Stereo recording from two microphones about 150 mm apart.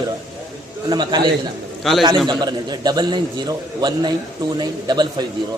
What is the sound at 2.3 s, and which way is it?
A man's voice, 30° right (ahead or behind).